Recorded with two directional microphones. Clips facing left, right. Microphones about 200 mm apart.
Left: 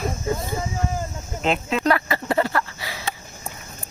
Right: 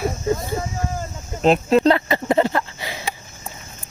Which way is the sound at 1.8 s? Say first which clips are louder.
Right 4 dB; 20° right (ahead or behind).